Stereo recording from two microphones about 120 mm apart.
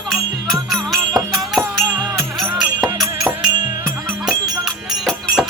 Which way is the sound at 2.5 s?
5° right (ahead or behind).